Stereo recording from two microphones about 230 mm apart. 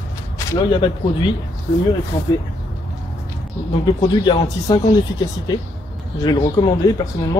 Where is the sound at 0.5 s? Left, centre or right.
Left.